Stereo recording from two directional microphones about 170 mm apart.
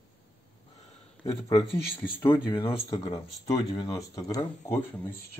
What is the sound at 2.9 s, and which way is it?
Speech, 35° left (ahead or behind).